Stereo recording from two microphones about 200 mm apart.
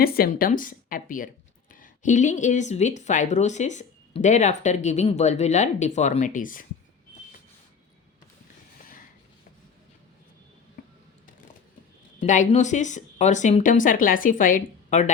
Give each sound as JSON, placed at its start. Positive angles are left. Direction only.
{"t": 0.0, "sound": "speech", "side_deg": 50}
{"t": 12.2, "sound": "speech", "side_deg": 35}